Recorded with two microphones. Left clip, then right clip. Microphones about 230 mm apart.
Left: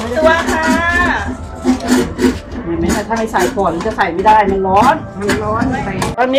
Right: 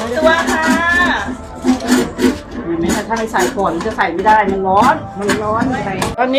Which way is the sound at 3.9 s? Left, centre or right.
Centre.